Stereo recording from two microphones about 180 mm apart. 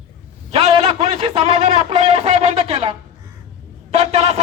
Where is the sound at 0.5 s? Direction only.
35° right (ahead or behind).